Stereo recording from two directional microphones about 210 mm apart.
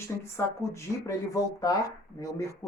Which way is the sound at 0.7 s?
15° left (ahead or behind).